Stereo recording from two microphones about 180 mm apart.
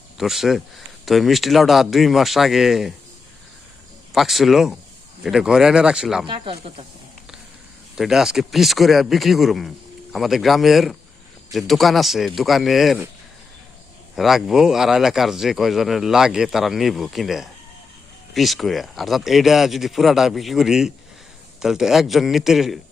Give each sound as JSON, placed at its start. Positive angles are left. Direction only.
{"t": 0.2, "sound": "speech", "side_deg": 0}
{"t": 4.1, "sound": "speech", "side_deg": 0}
{"t": 6.2, "sound": "speech", "side_deg": -30}
{"t": 7.9, "sound": "speech", "side_deg": 0}
{"t": 14.2, "sound": "speech", "side_deg": 0}